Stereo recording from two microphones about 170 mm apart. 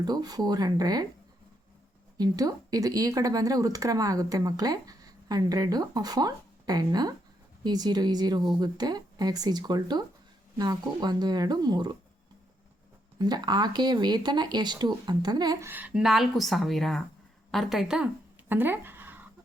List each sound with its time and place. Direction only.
0.0 s speech: 25° right (ahead or behind)
2.1 s speech: 20° right (ahead or behind)
13.1 s speech: 25° right (ahead or behind)
15.7 s speech: 5° right (ahead or behind)